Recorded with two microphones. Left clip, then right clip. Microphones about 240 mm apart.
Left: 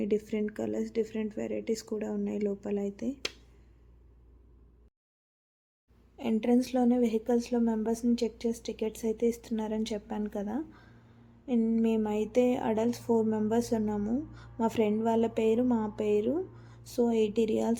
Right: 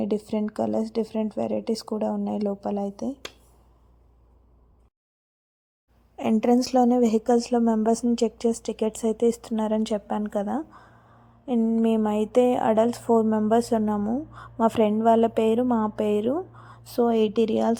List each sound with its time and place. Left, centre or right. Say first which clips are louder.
0.0 s a woman's voice: right 3 dB; right
6.1 s a woman's voice: right 7 dB; right